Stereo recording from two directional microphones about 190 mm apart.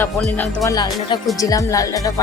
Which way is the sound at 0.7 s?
20° left (ahead or behind).